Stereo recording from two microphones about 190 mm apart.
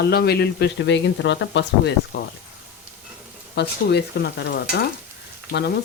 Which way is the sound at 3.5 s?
60° left (ahead or behind).